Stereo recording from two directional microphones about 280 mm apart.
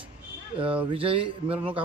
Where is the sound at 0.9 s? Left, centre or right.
Centre.